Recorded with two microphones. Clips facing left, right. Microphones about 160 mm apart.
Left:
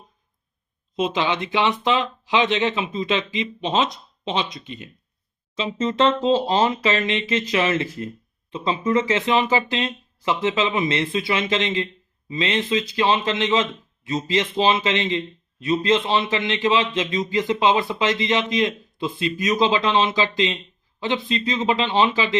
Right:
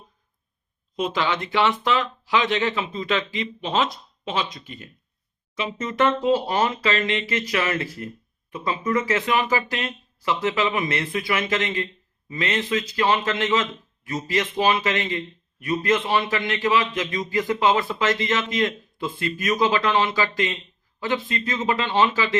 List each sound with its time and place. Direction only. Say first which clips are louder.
0.9 s speech: left 2 dB; 20° left (ahead or behind)